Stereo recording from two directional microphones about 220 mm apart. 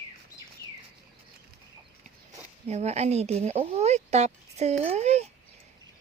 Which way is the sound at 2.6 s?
30° right (ahead or behind).